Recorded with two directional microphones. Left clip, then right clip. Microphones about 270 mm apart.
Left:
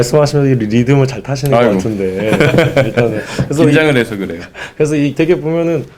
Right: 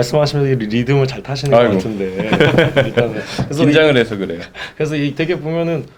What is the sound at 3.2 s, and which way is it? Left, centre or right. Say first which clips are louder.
Speech: left 4 dB; left.